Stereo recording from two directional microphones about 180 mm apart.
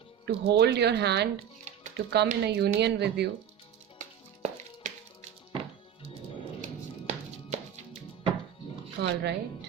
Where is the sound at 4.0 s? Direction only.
40° right (ahead or behind).